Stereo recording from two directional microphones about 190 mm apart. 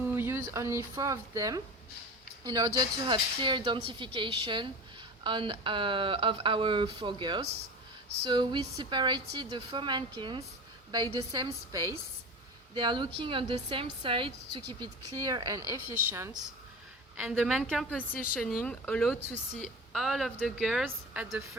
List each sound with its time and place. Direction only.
0.0 s speech: 10° right (ahead or behind)
17.2 s a woman's voice: 5° right (ahead or behind)